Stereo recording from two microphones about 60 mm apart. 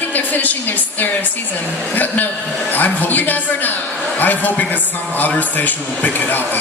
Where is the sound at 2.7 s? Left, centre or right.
Left.